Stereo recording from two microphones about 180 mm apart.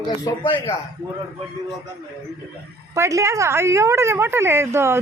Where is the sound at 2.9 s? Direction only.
15° right (ahead or behind).